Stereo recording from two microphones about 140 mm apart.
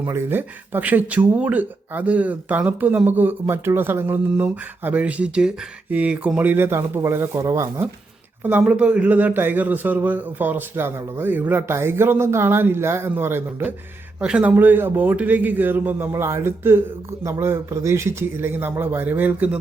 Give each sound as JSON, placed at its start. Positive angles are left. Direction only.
{"t": 0.0, "sound": "speech", "side_deg": -15}
{"t": 8.4, "sound": "speech", "side_deg": -10}